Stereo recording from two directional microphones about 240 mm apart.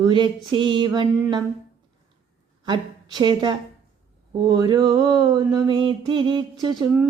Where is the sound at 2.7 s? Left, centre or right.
Centre.